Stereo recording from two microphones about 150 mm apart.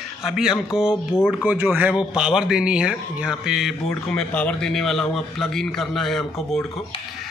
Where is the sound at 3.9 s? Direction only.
5° left (ahead or behind).